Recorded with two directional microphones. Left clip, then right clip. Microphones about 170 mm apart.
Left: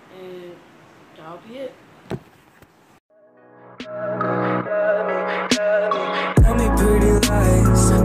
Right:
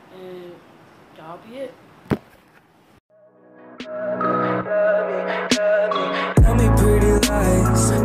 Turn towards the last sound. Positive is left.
turn(degrees=0)  # may be behind; listen again after turning